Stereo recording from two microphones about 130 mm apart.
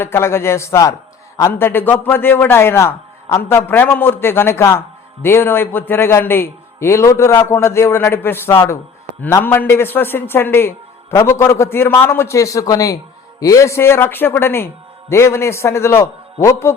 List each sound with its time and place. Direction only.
0.0 s a man's voice: 20° left (ahead or behind)